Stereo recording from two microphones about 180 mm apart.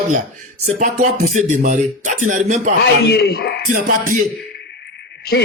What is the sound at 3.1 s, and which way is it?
Speech, 60° left (ahead or behind).